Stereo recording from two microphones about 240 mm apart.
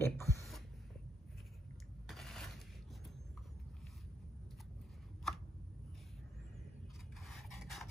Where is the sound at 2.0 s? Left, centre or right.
Centre.